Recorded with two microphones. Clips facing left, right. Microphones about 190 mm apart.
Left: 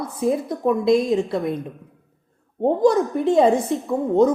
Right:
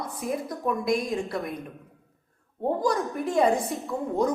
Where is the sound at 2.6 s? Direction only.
25° left (ahead or behind).